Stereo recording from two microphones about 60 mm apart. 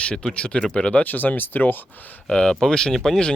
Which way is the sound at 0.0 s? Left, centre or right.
Centre.